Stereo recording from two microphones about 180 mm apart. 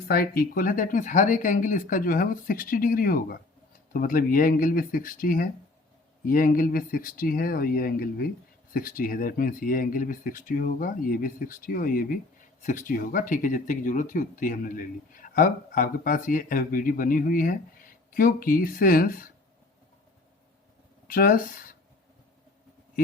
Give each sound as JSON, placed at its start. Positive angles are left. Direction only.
{"t": 0.1, "sound": "speech", "side_deg": 55}
{"t": 21.1, "sound": "speech", "side_deg": 50}